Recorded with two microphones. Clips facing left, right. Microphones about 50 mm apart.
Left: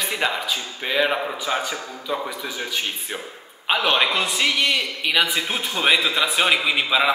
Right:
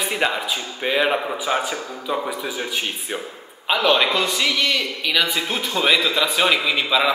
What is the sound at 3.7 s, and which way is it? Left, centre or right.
A man's voice, centre.